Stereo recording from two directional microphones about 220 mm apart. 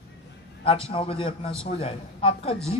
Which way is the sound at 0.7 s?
25° left (ahead or behind).